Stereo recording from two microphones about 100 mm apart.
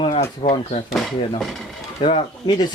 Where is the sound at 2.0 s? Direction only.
60° left (ahead or behind).